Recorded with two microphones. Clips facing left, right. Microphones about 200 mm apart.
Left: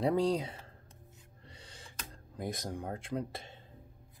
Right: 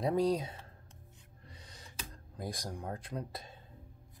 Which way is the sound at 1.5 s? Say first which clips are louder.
Left 1 dB; 30° left (ahead or behind).